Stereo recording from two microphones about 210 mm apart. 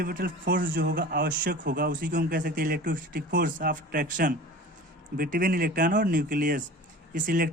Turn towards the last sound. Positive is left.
turn(degrees=-40)  # may be behind; listen again after turning